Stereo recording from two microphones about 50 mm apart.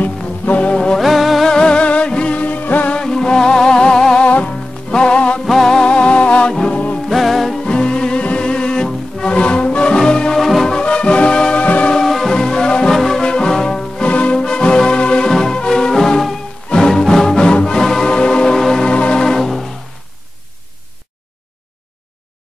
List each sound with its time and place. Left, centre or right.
0.5 s music: left
0.9 s music: centre
1.5 s music: centre; by 2.9 s left
2.9 s music: centre
4.3 s music: left
5.4 s music: centre
5.9 s music: left
7.1 s music: centre
7.7 s music: centre
10.3 s music: centre
10.8 s music: centre
11.9 s music: centre